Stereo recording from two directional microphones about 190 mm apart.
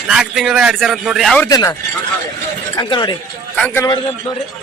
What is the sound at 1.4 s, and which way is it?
Speech, 15° left (ahead or behind).